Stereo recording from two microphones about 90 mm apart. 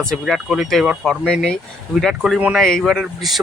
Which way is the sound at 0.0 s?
5° left (ahead or behind).